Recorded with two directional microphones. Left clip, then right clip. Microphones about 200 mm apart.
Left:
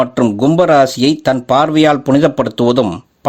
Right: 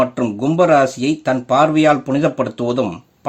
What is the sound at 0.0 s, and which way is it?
Speech, 40° left (ahead or behind).